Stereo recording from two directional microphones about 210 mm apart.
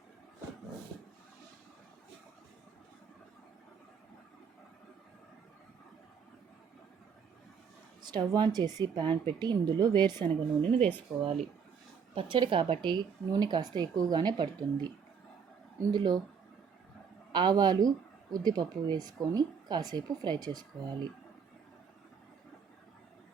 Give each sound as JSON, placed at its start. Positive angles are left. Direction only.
{"t": 8.0, "sound": "speech", "side_deg": -20}
{"t": 10.2, "sound": "speech", "side_deg": 10}
{"t": 12.1, "sound": "speech", "side_deg": -25}
{"t": 17.3, "sound": "speech", "side_deg": -20}